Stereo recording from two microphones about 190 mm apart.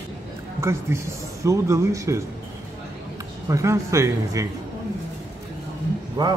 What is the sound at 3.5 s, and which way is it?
Speech, 15° right (ahead or behind).